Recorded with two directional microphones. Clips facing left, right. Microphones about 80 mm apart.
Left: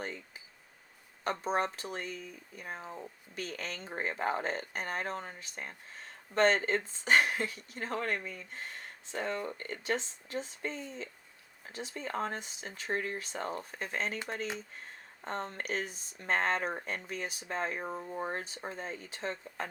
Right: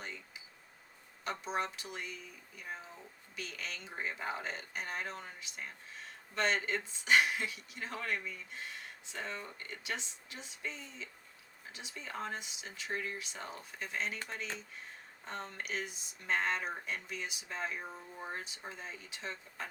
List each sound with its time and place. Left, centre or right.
0.0 s a sound: left
1.2 s speech: left
15.2 s speech: left